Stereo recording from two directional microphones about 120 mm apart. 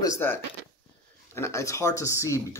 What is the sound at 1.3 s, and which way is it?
Speech, 25° left (ahead or behind).